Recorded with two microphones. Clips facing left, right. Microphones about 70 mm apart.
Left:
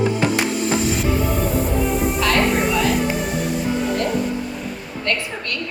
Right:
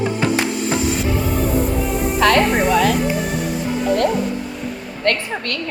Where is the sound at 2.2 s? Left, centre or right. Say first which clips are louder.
Right 6 dB; right.